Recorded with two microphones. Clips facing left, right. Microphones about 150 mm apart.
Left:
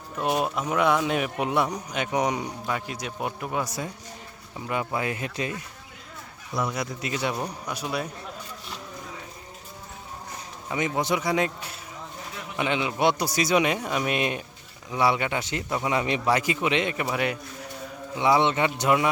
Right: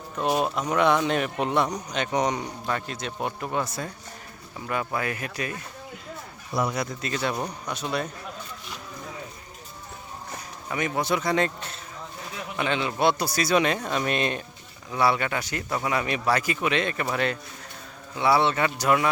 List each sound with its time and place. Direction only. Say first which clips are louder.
0.2 s a man's voice: right 1 dB; centre (ahead or behind); by 5.5 s 25° left (ahead or behind)
6.5 s speech: right 2 dB; 5° right (ahead or behind)
7.0 s a man's voice: left 1 dB; 15° left (ahead or behind)
10.7 s a man's voice: even; 20° left (ahead or behind)